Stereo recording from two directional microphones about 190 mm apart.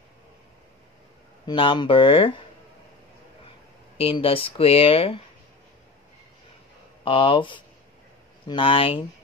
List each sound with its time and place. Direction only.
1.4 s speech: 25° left (ahead or behind)
4.0 s speech: 30° left (ahead or behind)
7.1 s speech: 25° left (ahead or behind)